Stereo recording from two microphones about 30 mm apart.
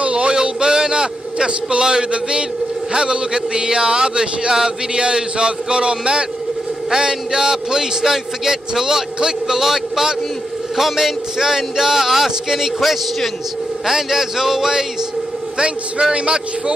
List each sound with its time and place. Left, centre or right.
0.0 s a sound: right
2.9 s a man's voice: right
6.9 s a man's voice: right
15.5 s a man's voice: right